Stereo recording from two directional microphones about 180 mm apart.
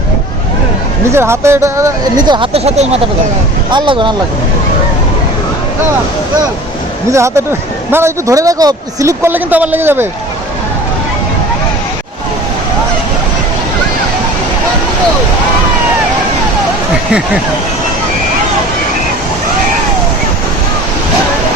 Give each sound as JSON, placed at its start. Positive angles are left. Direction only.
{"t": 1.1, "sound": "speech", "side_deg": -15}
{"t": 7.1, "sound": "a man's voice", "side_deg": -15}